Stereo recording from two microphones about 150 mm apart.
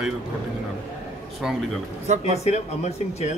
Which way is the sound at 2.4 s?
50° left (ahead or behind).